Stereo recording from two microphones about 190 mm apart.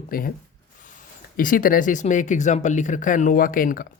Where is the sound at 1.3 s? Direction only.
45° left (ahead or behind).